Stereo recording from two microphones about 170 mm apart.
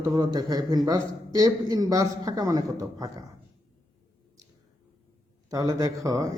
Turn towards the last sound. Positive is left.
turn(degrees=-20)  # may be behind; listen again after turning